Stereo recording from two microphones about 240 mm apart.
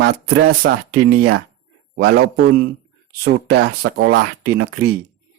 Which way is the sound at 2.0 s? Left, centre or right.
Right.